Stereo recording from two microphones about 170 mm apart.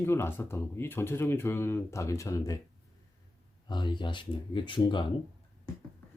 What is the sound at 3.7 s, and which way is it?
Speech, 25° left (ahead or behind).